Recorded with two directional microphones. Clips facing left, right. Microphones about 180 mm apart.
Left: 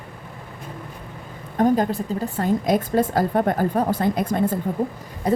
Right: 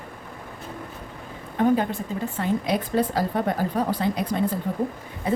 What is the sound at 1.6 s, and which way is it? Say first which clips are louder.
A woman's voice: left 2 dB; 40° left (ahead or behind).